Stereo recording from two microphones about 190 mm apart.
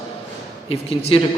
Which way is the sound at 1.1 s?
30° left (ahead or behind).